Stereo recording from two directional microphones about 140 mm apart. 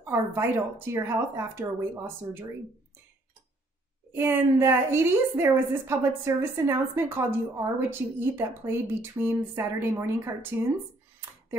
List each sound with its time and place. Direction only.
0.0 s a woman's voice: 20° right (ahead or behind)
4.1 s a woman's voice: 15° right (ahead or behind)